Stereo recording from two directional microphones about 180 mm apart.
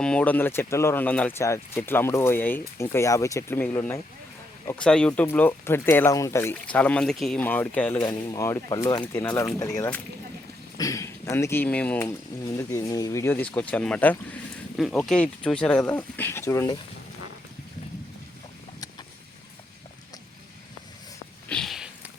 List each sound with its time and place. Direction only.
0.0 s speech: 5° left (ahead or behind)
8.0 s speech: 20° left (ahead or behind)
21.5 s a sound: centre (ahead or behind)